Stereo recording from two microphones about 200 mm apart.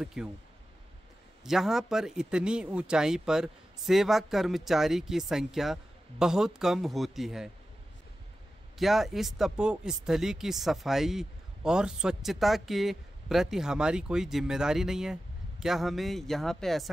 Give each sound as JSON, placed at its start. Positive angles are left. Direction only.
{"t": 0.0, "sound": "speech", "side_deg": -5}
{"t": 1.4, "sound": "speech", "side_deg": 0}
{"t": 8.7, "sound": "speech", "side_deg": 0}